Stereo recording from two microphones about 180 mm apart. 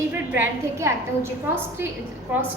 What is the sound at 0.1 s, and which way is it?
A woman's voice, 15° right (ahead or behind).